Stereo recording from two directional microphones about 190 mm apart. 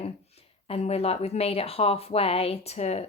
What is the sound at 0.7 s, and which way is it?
Speech, 35° left (ahead or behind).